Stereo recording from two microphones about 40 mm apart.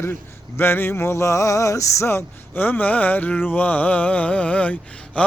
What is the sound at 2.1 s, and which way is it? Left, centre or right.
Speech, left.